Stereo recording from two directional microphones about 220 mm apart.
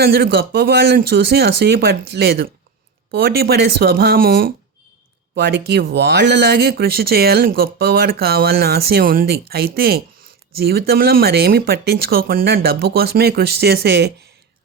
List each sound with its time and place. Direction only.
0.0 s speech: 45° right (ahead or behind)